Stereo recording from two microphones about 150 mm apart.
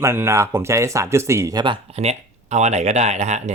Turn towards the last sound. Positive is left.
turn(degrees=-50)  # may be behind; listen again after turning